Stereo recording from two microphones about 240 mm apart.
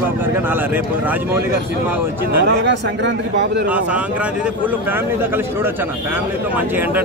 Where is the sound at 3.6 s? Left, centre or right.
Centre.